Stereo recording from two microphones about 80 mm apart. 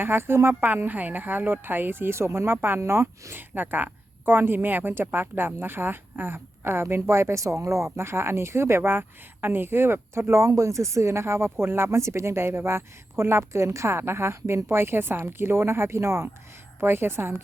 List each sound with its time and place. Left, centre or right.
0.0 s speech: right
0.7 s a woman's voice: right